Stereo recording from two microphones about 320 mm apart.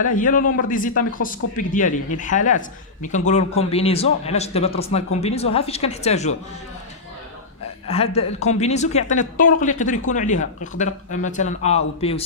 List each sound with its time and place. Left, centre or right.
0.0 s speech: left
7.9 s speech: centre